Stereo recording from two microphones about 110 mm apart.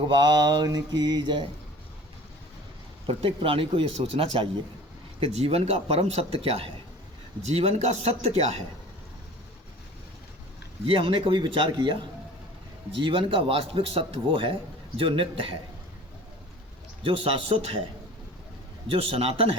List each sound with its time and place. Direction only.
0.1 s mantra: 40° right (ahead or behind)
3.1 s speech: 55° right (ahead or behind)
7.4 s speech: 80° right
10.8 s a man's voice: 55° right (ahead or behind)
17.0 s speech: 55° right (ahead or behind)
18.9 s speech: 55° right (ahead or behind)